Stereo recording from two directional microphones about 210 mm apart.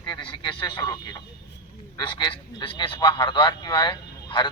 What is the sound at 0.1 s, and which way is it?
Speech, 20° left (ahead or behind).